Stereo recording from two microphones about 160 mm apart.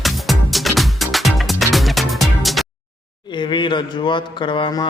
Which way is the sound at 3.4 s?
30° left (ahead or behind).